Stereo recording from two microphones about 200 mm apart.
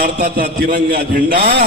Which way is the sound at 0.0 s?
50° right (ahead or behind).